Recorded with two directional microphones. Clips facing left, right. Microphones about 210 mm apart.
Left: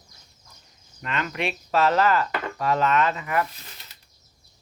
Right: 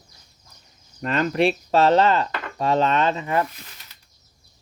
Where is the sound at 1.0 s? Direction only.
40° right (ahead or behind).